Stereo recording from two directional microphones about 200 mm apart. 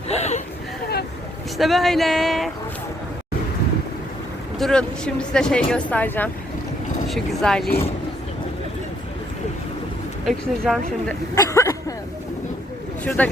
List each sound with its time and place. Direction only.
0.1 s a sound: 35° left (ahead or behind)
1.5 s speech: centre (ahead or behind)
4.5 s speech: 5° left (ahead or behind)
10.2 s speech: centre (ahead or behind)
11.3 s a sound: 15° left (ahead or behind)
13.1 s speech: 5° left (ahead or behind)